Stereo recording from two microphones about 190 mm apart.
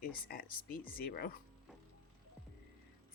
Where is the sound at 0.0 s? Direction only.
50° left (ahead or behind).